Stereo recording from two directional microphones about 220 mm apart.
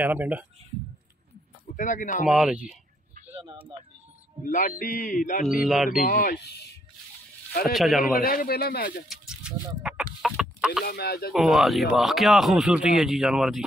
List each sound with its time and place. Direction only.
0.0 s speech: 10° right (ahead or behind)
1.8 s a sound: 35° left (ahead or behind)
2.2 s speech: 5° right (ahead or behind)
4.5 s a sound: 40° left (ahead or behind)
5.6 s speech: centre (ahead or behind)
6.0 s a sound: 35° left (ahead or behind)
6.4 s speech: 50° left (ahead or behind)
7.7 s speech: centre (ahead or behind)
8.1 s speech: 45° left (ahead or behind)
9.1 s speech: 5° right (ahead or behind)
10.9 s speech: 45° left (ahead or behind)
11.3 s speech: centre (ahead or behind)